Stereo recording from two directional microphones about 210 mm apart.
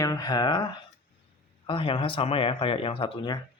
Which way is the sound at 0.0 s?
15° left (ahead or behind).